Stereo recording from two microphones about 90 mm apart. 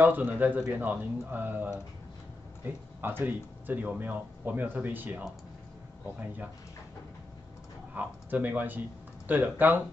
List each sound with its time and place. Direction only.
0.0 s speech: 20° right (ahead or behind)
7.9 s speech: 20° right (ahead or behind)